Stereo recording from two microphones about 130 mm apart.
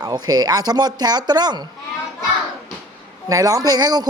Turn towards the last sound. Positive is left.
turn(degrees=-30)  # may be behind; listen again after turning